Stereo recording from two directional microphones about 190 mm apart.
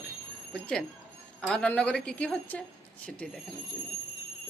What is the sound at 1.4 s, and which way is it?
Speech, 5° left (ahead or behind).